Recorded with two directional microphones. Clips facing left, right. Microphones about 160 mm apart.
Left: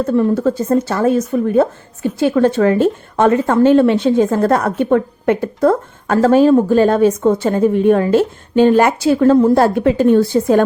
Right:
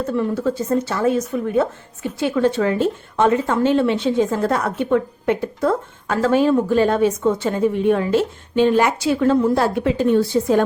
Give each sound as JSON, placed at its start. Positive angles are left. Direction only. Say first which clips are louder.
{"t": 0.0, "sound": "a woman's voice", "louder": "left 6 dB", "side_deg": 40}